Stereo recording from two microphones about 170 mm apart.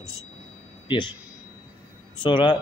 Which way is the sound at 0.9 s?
30° left (ahead or behind).